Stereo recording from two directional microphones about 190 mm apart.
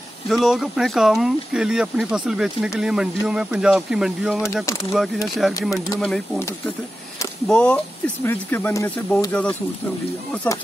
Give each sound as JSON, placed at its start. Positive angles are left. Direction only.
{"t": 0.5, "sound": "speech", "side_deg": 0}
{"t": 5.6, "sound": "speech", "side_deg": 20}
{"t": 5.9, "sound": "speech", "side_deg": 0}
{"t": 7.4, "sound": "speech", "side_deg": 5}